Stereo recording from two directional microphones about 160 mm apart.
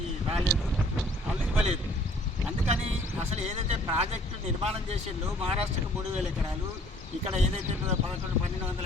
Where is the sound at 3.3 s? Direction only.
45° right (ahead or behind).